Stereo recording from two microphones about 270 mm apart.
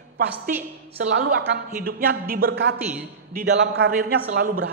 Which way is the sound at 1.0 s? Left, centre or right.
Right.